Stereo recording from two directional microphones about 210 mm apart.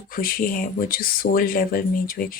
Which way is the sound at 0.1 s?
45° left (ahead or behind).